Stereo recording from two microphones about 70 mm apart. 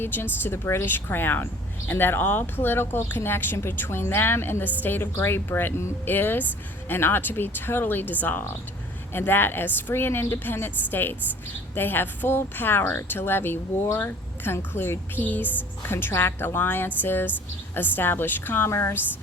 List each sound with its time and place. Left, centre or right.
0.0 s speech: left